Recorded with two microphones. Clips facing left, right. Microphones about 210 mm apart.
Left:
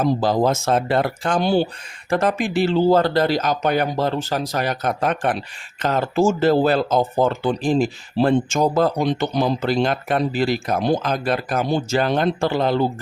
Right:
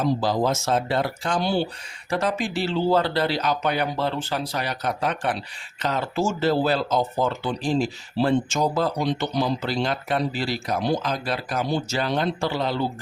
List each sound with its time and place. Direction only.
0.0 s speech: 50° left (ahead or behind)